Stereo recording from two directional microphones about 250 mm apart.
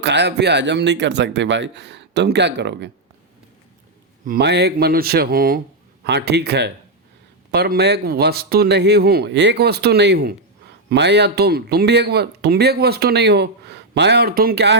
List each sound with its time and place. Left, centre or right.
0.0 s speech: right
4.3 s speech: right